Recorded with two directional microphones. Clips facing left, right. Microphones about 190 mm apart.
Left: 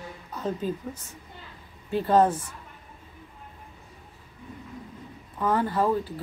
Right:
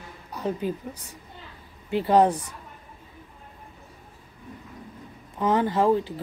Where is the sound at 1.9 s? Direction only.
15° right (ahead or behind).